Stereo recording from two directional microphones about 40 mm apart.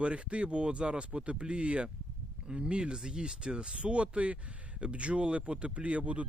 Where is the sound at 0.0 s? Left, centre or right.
Right.